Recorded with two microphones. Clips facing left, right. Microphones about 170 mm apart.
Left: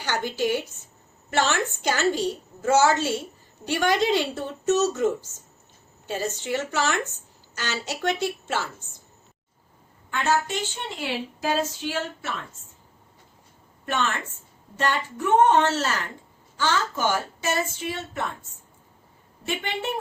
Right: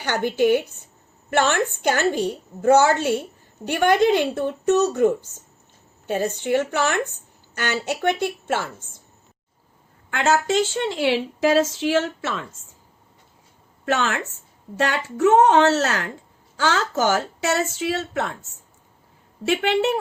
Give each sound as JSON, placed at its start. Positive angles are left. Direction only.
{"t": 0.0, "sound": "a woman's voice", "side_deg": -55}
{"t": 10.1, "sound": "a woman's voice", "side_deg": -90}
{"t": 13.8, "sound": "a woman's voice", "side_deg": -75}
{"t": 19.5, "sound": "speech", "side_deg": -75}